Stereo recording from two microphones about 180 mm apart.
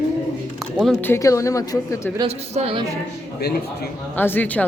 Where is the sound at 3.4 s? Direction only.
60° left (ahead or behind).